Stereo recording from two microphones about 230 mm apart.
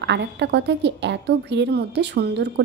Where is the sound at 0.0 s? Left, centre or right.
Right.